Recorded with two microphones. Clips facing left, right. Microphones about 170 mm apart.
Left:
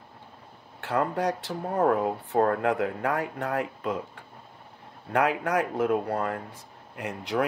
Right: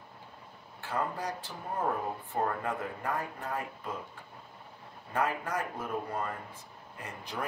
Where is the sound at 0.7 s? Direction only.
70° left (ahead or behind).